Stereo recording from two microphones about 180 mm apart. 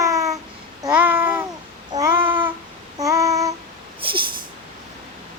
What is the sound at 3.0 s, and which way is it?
Child singing, 15° right (ahead or behind).